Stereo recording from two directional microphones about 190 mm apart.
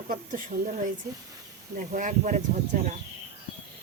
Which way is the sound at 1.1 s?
15° right (ahead or behind).